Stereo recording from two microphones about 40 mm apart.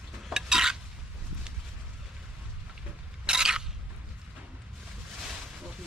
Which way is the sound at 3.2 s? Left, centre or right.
Centre.